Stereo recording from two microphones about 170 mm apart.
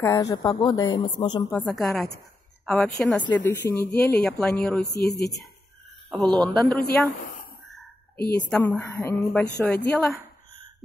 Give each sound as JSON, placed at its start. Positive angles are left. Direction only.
{"t": 0.0, "sound": "a woman's voice", "side_deg": 20}
{"t": 1.7, "sound": "speech", "side_deg": 0}
{"t": 5.0, "sound": "a woman's voice", "side_deg": 20}
{"t": 6.4, "sound": "a woman's voice", "side_deg": 10}
{"t": 8.4, "sound": "a woman's voice", "side_deg": 10}